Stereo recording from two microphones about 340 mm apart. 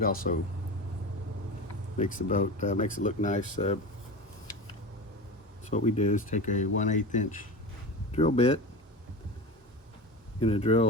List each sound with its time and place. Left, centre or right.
0.3 s speech: left
2.0 s speech: left
5.7 s speech: centre
10.4 s speech: centre